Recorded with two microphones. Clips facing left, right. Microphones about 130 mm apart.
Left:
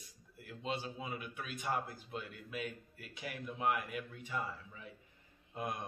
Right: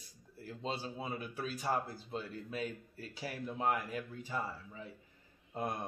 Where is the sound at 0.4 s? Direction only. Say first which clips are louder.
Right 1 dB; 30° right (ahead or behind).